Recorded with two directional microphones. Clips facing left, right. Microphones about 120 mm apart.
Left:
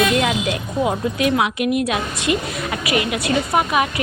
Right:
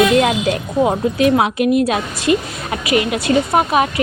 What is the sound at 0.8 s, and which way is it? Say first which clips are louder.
A woman's voice: right 4 dB; 30° right (ahead or behind).